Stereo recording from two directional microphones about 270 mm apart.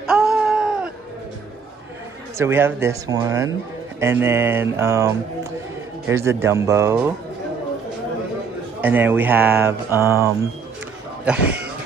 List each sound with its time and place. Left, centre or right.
0.0 s a sound: centre
2.3 s speech: centre
8.8 s speech: centre